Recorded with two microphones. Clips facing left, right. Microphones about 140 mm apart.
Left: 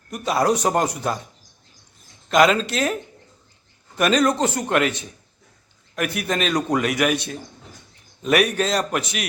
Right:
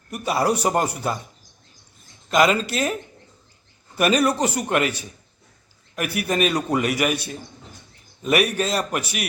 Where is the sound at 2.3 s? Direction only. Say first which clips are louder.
Left 2 dB; 5° right (ahead or behind).